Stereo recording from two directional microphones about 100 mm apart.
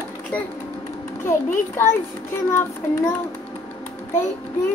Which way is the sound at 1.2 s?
25° left (ahead or behind).